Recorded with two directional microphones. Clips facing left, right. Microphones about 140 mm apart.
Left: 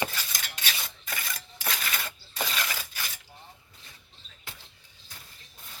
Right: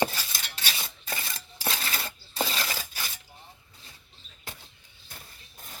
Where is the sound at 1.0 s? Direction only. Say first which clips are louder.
Right 1 dB; 30° right (ahead or behind).